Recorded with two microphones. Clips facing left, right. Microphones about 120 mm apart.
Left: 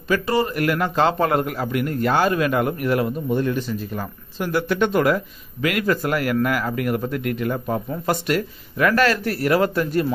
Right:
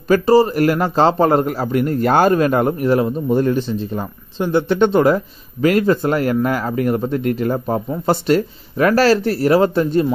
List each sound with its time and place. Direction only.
0.1 s a man's voice: 35° right (ahead or behind)
3.3 s a man's voice: 40° right (ahead or behind)
3.6 s a man's voice: 25° right (ahead or behind)